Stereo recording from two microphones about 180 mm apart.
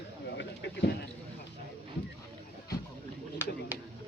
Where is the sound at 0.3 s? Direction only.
75° left (ahead or behind).